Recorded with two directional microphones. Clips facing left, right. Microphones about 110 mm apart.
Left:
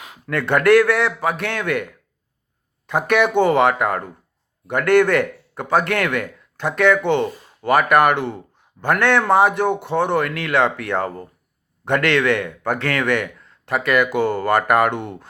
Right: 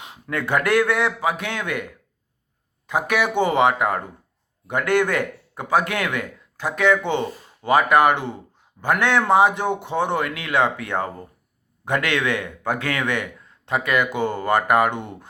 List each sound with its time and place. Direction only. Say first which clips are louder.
0.0 s speech: left 3 dB; 25° right (ahead or behind)
2.8 s speech: left 4 dB; 10° right (ahead or behind)